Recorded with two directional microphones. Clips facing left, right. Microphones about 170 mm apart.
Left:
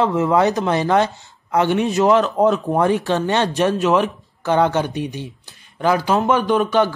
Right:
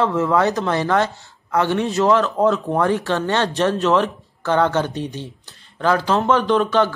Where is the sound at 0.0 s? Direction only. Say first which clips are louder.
Left 1 dB; 15° left (ahead or behind).